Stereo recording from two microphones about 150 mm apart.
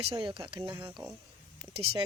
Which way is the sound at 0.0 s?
30° right (ahead or behind).